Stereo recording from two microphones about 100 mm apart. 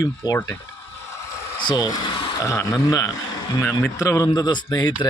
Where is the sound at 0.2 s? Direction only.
40° left (ahead or behind).